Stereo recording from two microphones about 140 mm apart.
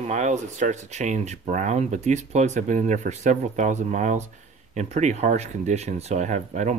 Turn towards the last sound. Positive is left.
turn(degrees=-60)  # may be behind; listen again after turning